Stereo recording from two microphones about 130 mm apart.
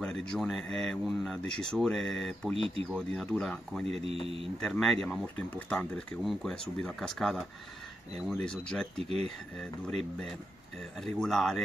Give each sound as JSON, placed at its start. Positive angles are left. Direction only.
{"t": 0.0, "sound": "speech", "side_deg": 5}
{"t": 2.5, "sound": "speech", "side_deg": -45}
{"t": 3.0, "sound": "speech", "side_deg": 5}
{"t": 3.8, "sound": "speech", "side_deg": -50}
{"t": 4.6, "sound": "speech", "side_deg": 5}
{"t": 8.9, "sound": "speech", "side_deg": -55}
{"t": 11.0, "sound": "speech", "side_deg": 0}